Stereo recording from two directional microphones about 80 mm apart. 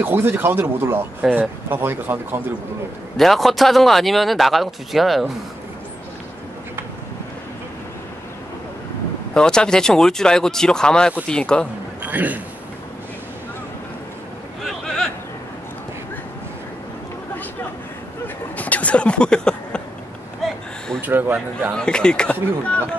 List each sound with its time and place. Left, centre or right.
0.0 s speech: right
1.2 s speech: centre
1.7 s speech: right
3.2 s speech: centre
9.3 s speech: centre
12.0 s a man's voice: centre
14.6 s a sound: centre
18.6 s a sound: centre
21.0 s speech: right
21.7 s speech: centre